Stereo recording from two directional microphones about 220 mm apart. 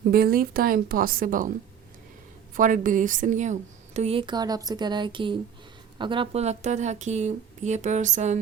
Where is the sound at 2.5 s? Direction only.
35° right (ahead or behind).